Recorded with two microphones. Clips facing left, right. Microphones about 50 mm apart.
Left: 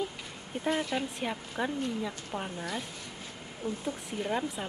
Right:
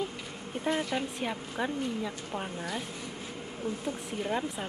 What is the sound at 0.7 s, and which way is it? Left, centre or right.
Speech, centre.